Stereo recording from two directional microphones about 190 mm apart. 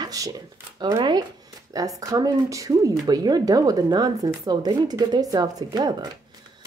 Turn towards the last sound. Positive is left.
turn(degrees=-20)  # may be behind; listen again after turning